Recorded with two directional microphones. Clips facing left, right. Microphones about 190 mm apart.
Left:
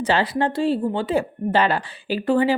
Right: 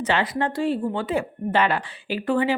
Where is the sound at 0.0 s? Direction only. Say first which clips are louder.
Left 3 dB; 35° left (ahead or behind).